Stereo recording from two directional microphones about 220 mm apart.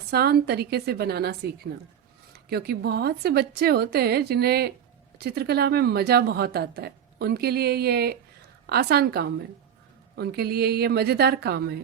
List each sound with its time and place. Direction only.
0.1 s a woman's voice: 45° right (ahead or behind)